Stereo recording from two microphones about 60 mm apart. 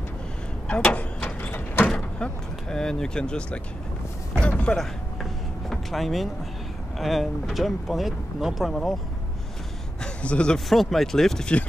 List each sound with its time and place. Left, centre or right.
0.7 s vehicle: centre
1.9 s speech: centre
4.4 s a sound: centre
4.7 s vehicle: centre
7.0 s speech: centre
10.0 s a man's voice: centre
10.7 s speech: centre